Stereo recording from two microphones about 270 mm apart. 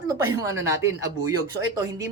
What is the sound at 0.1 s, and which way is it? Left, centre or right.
A woman's voice, centre.